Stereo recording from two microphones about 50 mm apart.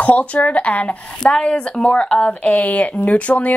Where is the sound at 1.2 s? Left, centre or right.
Centre.